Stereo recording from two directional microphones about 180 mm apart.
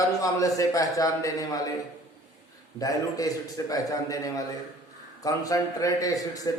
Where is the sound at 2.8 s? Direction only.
20° left (ahead or behind).